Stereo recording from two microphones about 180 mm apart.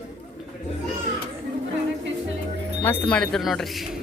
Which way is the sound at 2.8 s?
10° left (ahead or behind).